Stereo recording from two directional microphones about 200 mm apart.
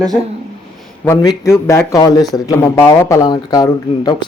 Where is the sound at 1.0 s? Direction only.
20° left (ahead or behind).